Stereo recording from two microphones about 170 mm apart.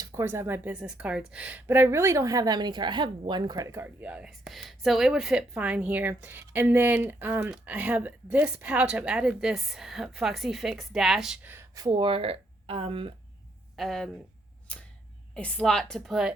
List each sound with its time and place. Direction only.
0.0 s a woman's voice: 15° right (ahead or behind)
11.5 s speech: 20° right (ahead or behind)
13.7 s a woman's voice: centre (ahead or behind)
14.7 s a sound: 5° left (ahead or behind)
15.4 s a woman's voice: 5° left (ahead or behind)